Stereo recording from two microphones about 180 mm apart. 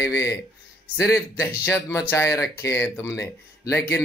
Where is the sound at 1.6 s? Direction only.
15° left (ahead or behind).